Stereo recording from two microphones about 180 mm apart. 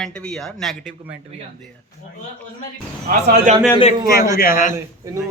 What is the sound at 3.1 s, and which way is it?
Speech, 45° right (ahead or behind).